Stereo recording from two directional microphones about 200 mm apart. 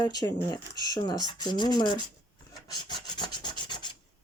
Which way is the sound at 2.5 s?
20° left (ahead or behind).